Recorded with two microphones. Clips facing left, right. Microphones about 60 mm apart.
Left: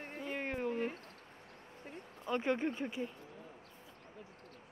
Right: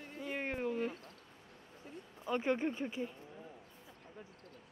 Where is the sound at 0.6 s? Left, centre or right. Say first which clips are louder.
Even; left.